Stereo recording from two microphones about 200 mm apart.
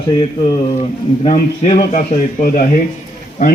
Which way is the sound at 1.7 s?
45° left (ahead or behind).